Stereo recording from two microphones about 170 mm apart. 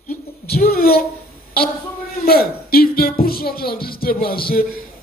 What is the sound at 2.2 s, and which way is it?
Speech, 60° left (ahead or behind).